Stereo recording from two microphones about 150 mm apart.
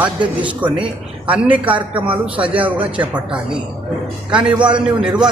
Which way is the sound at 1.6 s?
35° right (ahead or behind).